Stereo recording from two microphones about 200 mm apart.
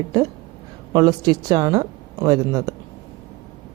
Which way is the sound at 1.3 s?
20° right (ahead or behind).